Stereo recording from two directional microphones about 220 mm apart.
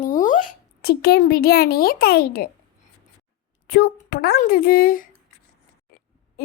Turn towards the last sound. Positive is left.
turn(degrees=40)  # may be behind; listen again after turning